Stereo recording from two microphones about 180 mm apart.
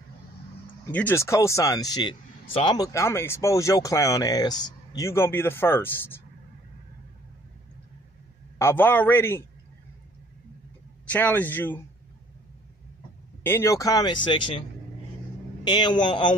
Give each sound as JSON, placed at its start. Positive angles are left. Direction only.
{"t": 0.8, "sound": "speech", "side_deg": 15}
{"t": 8.5, "sound": "speech", "side_deg": 15}
{"t": 11.1, "sound": "speech", "side_deg": 10}
{"t": 13.4, "sound": "speech", "side_deg": 15}
{"t": 15.6, "sound": "speech", "side_deg": 25}